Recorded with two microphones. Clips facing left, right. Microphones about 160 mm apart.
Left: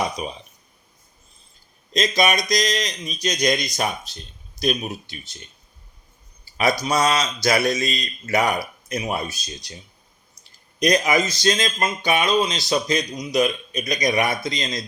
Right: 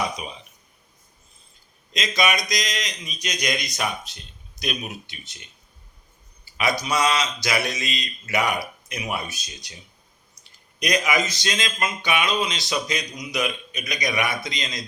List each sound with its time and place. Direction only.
0.2 s speech: 40° left (ahead or behind)
1.9 s speech: 35° left (ahead or behind)
6.4 s a sound: 35° left (ahead or behind)
6.8 s speech: 40° left (ahead or behind)